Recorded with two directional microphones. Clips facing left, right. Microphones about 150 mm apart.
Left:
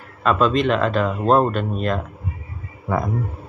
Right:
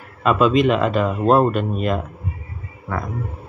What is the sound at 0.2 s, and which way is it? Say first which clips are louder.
Speech: right 2 dB; 5° right (ahead or behind).